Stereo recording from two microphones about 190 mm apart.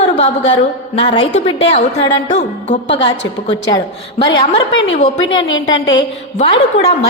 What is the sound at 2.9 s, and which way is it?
A woman's voice, 25° left (ahead or behind).